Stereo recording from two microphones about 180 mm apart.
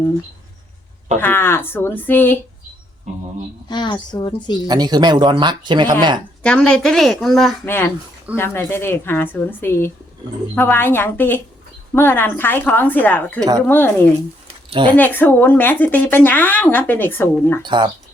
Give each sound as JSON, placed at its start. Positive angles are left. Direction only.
{"t": 1.2, "sound": "a woman's voice", "side_deg": 10}
{"t": 3.7, "sound": "speech", "side_deg": 25}
{"t": 4.6, "sound": "speech", "side_deg": -20}
{"t": 6.4, "sound": "speech", "side_deg": 5}
{"t": 8.4, "sound": "a woman's voice", "side_deg": 15}
{"t": 14.9, "sound": "a woman's voice", "side_deg": 10}
{"t": 17.6, "sound": "speech", "side_deg": -25}